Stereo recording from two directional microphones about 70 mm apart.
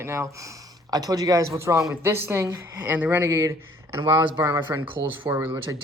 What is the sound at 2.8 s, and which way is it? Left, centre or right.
Speech, right.